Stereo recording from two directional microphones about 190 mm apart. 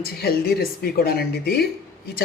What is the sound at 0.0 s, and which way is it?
Speech, 55° left (ahead or behind).